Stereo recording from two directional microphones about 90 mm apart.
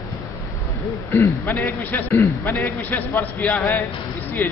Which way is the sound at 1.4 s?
20° left (ahead or behind).